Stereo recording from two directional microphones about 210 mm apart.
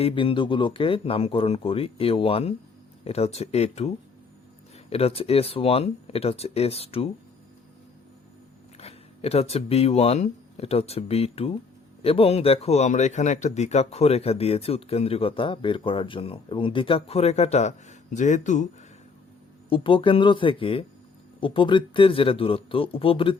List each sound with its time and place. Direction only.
0.0 s speech: 25° left (ahead or behind)
8.8 s speech: 30° left (ahead or behind)
19.7 s speech: 25° left (ahead or behind)